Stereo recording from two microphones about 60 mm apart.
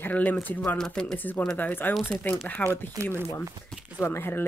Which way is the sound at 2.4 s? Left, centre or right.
Left.